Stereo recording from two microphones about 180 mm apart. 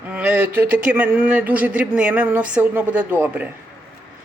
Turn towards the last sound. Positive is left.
turn(degrees=-10)  # may be behind; listen again after turning